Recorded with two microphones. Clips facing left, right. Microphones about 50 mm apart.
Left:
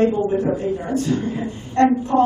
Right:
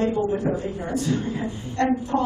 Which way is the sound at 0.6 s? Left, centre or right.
Left.